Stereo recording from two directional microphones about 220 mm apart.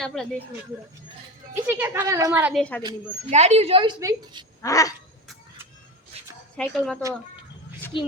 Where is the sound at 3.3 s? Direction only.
30° right (ahead or behind).